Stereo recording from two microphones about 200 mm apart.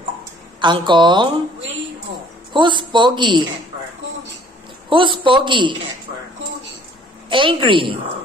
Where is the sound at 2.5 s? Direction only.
25° right (ahead or behind).